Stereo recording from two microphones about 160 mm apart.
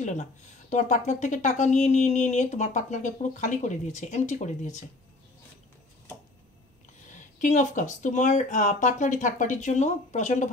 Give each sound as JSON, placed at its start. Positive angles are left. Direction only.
{"t": 0.0, "sound": "speech", "side_deg": 45}
{"t": 7.3, "sound": "speech", "side_deg": 50}